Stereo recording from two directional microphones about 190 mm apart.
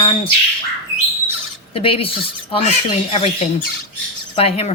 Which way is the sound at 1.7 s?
30° left (ahead or behind).